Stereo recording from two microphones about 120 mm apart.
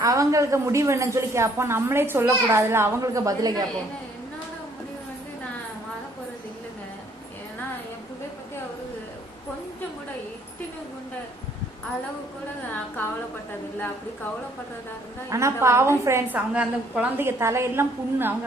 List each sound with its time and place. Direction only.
0.0 s a woman's voice: 30° right (ahead or behind)
15.3 s a woman's voice: 25° right (ahead or behind)
16.6 s a woman's voice: 10° right (ahead or behind)